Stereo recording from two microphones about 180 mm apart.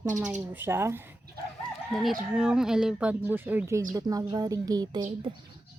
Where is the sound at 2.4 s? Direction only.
5° right (ahead or behind); by 5.0 s 20° right (ahead or behind).